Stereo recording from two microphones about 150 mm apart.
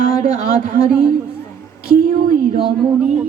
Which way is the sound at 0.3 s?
65° right (ahead or behind).